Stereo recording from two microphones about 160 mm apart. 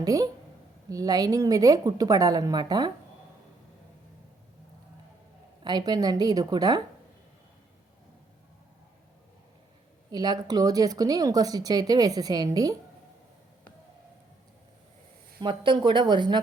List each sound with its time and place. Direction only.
0.0 s a sound: 20° right (ahead or behind)
0.9 s speech: 25° right (ahead or behind)
5.6 s speech: 25° right (ahead or behind)
10.1 s speech: 25° right (ahead or behind)
15.4 s speech: 30° right (ahead or behind)